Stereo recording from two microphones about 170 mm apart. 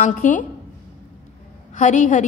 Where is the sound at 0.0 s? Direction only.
50° left (ahead or behind).